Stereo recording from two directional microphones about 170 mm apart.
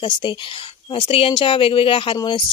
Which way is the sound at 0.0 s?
30° left (ahead or behind).